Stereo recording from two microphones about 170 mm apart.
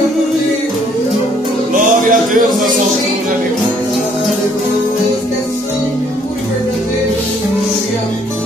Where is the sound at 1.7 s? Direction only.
50° right (ahead or behind).